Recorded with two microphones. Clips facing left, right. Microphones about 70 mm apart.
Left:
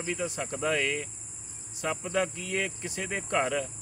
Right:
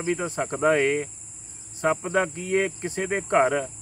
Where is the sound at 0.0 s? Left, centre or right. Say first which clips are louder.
Right 6 dB; right.